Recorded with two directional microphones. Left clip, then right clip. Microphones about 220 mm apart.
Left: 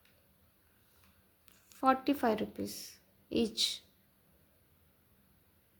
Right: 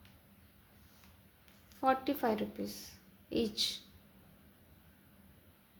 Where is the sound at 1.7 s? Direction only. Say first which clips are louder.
Left 2 dB; 25° left (ahead or behind).